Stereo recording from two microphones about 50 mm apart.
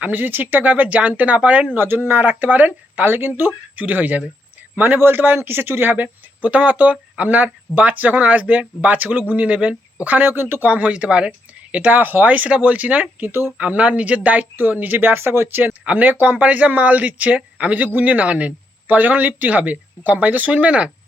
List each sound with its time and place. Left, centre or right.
0.0 s speech: right
1.7 s speech: right
4.8 s speech: right
6.4 s speech: right
10.7 s speech: right
13.2 s speech: right
13.6 s speech: right
16.0 s speech: right